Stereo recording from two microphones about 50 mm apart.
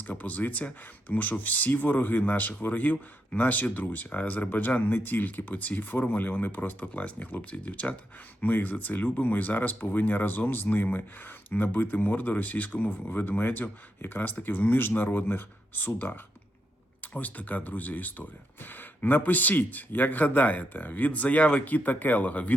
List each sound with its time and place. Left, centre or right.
0.1 s speech: left
8.4 s speech: left
17.2 s speech: left